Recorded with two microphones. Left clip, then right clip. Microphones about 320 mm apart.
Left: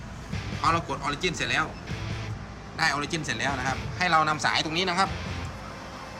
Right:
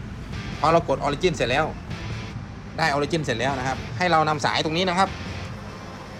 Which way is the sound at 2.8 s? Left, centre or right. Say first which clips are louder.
Right 4 dB; centre.